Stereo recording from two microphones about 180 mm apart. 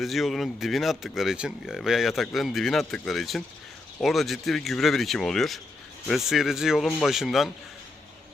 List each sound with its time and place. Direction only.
0.0 s speech: centre (ahead or behind)